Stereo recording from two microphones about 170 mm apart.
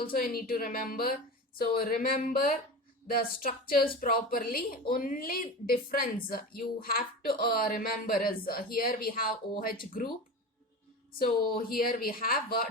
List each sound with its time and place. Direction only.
0.0 s a woman's voice: 60° left (ahead or behind)
11.2 s a woman's voice: 60° left (ahead or behind)